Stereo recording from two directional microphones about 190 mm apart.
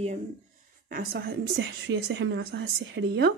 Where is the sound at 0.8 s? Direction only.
50° right (ahead or behind).